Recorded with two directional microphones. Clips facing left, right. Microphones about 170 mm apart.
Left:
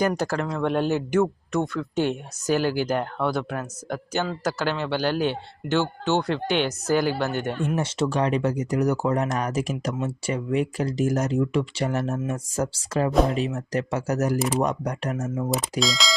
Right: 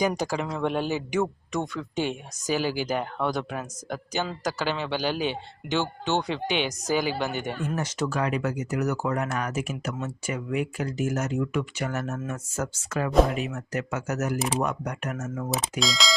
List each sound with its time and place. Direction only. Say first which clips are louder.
0.0 s a man's voice: left 2 dB; 10° right (ahead or behind)
7.8 s speech: left 4 dB; 30° left (ahead or behind)
15.8 s speech: even; centre (ahead or behind)